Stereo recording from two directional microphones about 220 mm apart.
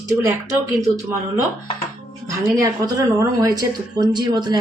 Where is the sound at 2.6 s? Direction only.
15° right (ahead or behind).